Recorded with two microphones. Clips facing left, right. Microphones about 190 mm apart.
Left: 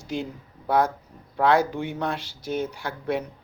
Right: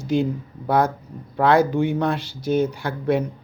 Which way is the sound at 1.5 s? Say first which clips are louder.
Right 8 dB; 50° right (ahead or behind).